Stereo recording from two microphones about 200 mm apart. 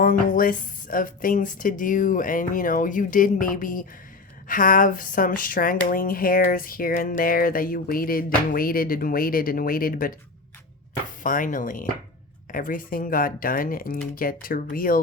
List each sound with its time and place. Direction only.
0.0 s speech: 45° left (ahead or behind)
11.2 s speech: 40° left (ahead or behind)